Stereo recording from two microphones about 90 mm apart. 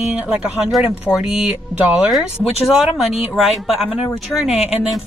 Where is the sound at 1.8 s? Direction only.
20° right (ahead or behind).